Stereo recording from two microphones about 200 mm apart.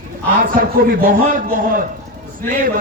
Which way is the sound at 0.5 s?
45° right (ahead or behind).